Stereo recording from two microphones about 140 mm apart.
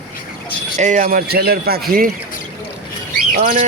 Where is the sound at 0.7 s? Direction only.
60° right (ahead or behind); by 2.1 s 90° right.